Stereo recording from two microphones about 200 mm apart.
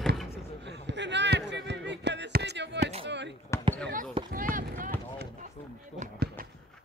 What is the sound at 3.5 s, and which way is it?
Basketball bounce, 15° left (ahead or behind).